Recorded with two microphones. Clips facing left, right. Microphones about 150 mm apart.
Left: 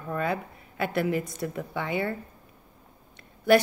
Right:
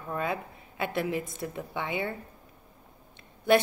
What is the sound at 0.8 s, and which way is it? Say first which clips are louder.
A woman's voice: left 3 dB; 25° right (ahead or behind).